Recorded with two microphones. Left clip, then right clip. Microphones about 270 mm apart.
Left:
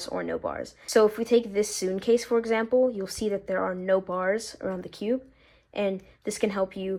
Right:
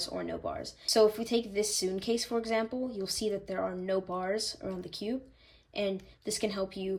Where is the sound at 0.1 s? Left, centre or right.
Centre.